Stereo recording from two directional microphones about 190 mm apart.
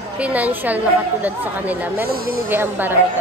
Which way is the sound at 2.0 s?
50° right (ahead or behind).